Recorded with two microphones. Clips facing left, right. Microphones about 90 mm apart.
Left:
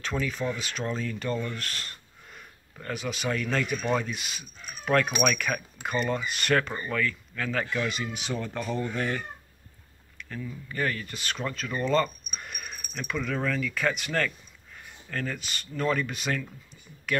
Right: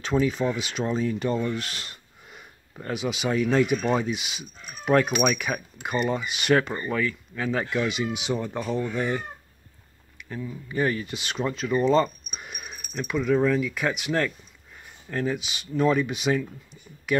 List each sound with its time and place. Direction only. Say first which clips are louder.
0.0 s speech: right 6 dB; 25° right (ahead or behind)